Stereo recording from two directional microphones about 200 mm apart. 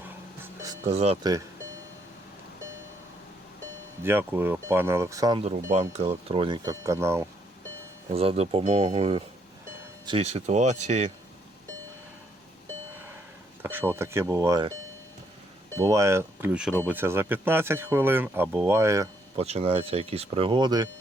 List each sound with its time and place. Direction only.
0.9 s speech: 30° right (ahead or behind)
4.0 s speech: 10° right (ahead or behind)
5.5 s speech: 35° right (ahead or behind); by 7.3 s 15° right (ahead or behind)
8.1 s speech: 30° right (ahead or behind)
13.6 s speech: 10° right (ahead or behind)
15.8 s speech: 15° right (ahead or behind)
19.4 s speech: 30° right (ahead or behind)